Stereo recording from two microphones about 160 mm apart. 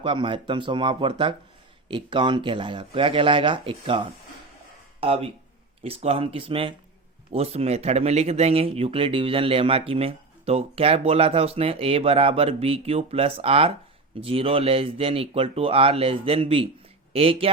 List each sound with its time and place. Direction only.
0.0 s speech: 30° right (ahead or behind)